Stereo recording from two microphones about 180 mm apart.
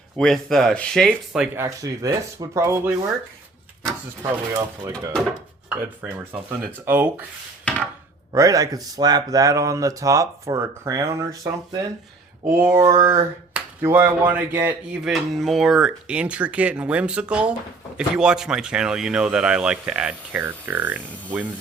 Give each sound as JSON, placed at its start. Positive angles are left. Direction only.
{"t": 0.2, "sound": "speech", "side_deg": 0}
{"t": 1.5, "sound": "speech", "side_deg": -20}
{"t": 4.8, "sound": "speech", "side_deg": -20}
{"t": 5.6, "sound": "speech", "side_deg": -10}
{"t": 8.3, "sound": "speech", "side_deg": -20}
{"t": 13.5, "sound": "speech", "side_deg": -10}